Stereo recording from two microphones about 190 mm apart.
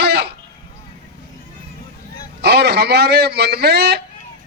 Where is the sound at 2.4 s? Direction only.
60° right (ahead or behind).